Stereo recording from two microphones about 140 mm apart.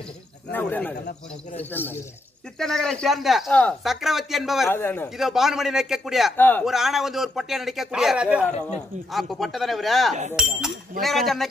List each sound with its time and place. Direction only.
0.5 s speech: 15° left (ahead or behind)
2.6 s speech: 5° left (ahead or behind)
4.6 s speech: 15° left (ahead or behind)
5.1 s speech: 5° right (ahead or behind)
6.3 s speech: 15° left (ahead or behind)
6.6 s speech: centre (ahead or behind)